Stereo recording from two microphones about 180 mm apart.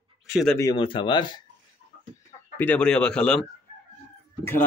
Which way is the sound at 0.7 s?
30° left (ahead or behind).